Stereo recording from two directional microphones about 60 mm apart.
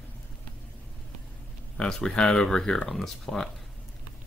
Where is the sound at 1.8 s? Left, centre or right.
Centre.